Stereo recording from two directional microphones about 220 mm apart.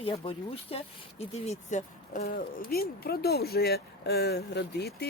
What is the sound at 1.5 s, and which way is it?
Speech, 35° left (ahead or behind).